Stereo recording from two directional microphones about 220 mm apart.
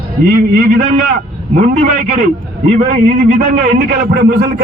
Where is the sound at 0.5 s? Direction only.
35° right (ahead or behind).